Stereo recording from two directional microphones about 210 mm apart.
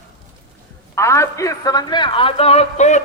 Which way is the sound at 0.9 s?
15° left (ahead or behind).